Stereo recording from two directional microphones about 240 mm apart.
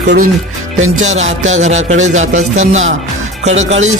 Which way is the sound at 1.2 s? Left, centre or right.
Right.